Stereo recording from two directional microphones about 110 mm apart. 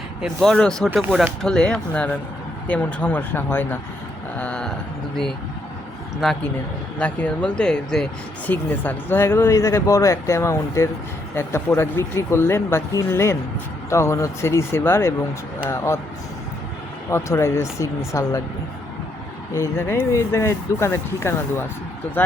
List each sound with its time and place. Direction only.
0.4 s speech: 5° left (ahead or behind)
4.4 s a sound: 10° left (ahead or behind)
6.2 s speech: centre (ahead or behind)
7.0 s speech: 10° left (ahead or behind)
8.4 s speech: 15° left (ahead or behind)
17.1 s speech: 25° left (ahead or behind)
19.5 s speech: 20° left (ahead or behind)